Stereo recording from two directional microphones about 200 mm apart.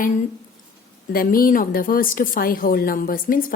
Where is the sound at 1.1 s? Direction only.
45° left (ahead or behind).